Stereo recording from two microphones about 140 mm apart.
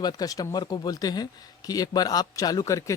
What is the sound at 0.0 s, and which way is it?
Speech, 25° left (ahead or behind).